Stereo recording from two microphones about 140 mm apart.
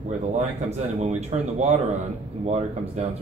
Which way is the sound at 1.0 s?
50° right (ahead or behind).